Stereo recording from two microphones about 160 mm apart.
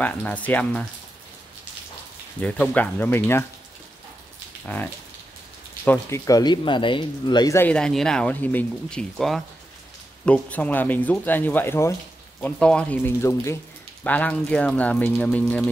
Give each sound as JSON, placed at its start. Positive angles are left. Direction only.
{"t": 0.0, "sound": "speech", "side_deg": 10}
{"t": 2.4, "sound": "speech", "side_deg": 10}
{"t": 5.9, "sound": "speech", "side_deg": 15}
{"t": 7.5, "sound": "speech", "side_deg": 10}